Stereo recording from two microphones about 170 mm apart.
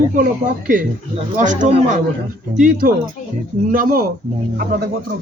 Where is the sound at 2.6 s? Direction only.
55° right (ahead or behind).